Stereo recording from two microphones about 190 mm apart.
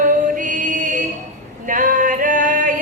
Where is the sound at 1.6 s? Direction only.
45° right (ahead or behind).